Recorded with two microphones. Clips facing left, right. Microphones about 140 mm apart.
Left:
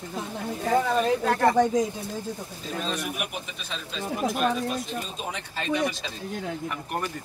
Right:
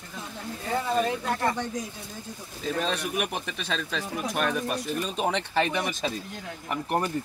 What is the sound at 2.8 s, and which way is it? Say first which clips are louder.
Speech: right 2 dB; 70° right (ahead or behind).